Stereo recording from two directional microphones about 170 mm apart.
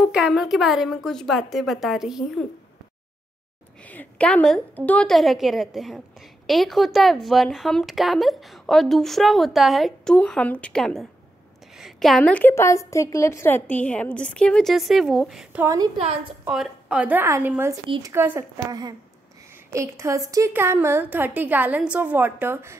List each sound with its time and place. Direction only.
0.0 s a woman's voice: 5° right (ahead or behind)
3.8 s a woman's voice: 10° left (ahead or behind)
15.6 s a woman's voice: 20° right (ahead or behind)
16.0 s a woman's voice: 40° right (ahead or behind)
16.4 s a woman's voice: 5° right (ahead or behind)
17.8 s a woman's voice: 30° right (ahead or behind)
18.1 s a woman's voice: 15° right (ahead or behind)